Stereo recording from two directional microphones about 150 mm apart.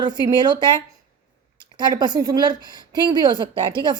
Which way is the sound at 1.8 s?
30° right (ahead or behind).